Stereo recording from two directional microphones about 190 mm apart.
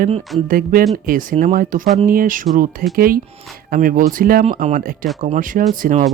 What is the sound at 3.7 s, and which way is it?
Speech, 45° right (ahead or behind).